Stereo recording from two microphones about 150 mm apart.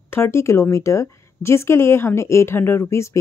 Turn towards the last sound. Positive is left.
turn(degrees=20)  # may be behind; listen again after turning